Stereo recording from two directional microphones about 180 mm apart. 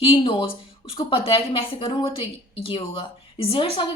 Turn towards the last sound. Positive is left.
turn(degrees=30)  # may be behind; listen again after turning